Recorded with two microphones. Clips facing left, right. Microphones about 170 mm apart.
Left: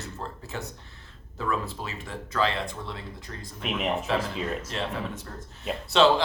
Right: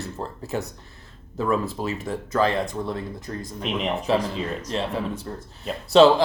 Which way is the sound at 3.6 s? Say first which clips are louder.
Right 3 dB; 5° left (ahead or behind).